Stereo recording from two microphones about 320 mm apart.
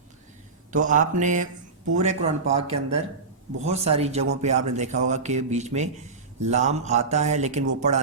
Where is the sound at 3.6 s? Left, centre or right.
Centre.